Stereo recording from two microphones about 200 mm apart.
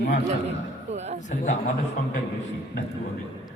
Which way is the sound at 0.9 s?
35° right (ahead or behind).